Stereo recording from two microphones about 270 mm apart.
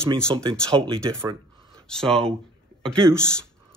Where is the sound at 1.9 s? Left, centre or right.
Centre.